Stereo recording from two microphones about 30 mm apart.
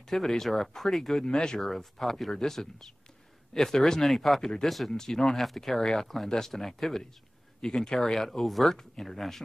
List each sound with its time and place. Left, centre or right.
0.0 s speech: centre
1.2 s speech: left
1.6 s speech: centre
2.3 s speech: centre
4.1 s speech: centre
4.9 s speech: centre
5.3 s speech: centre
5.8 s speech: centre
7.6 s speech: left
8.1 s speech: centre